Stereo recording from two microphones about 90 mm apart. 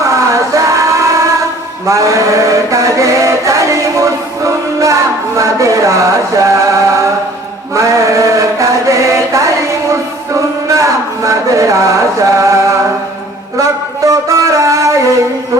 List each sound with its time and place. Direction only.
0.0 s music: 35° right (ahead or behind)
1.9 s mantra: 35° right (ahead or behind)
5.4 s music: 35° right (ahead or behind)
7.8 s chant: 35° right (ahead or behind)
10.8 s a sound: 35° right (ahead or behind)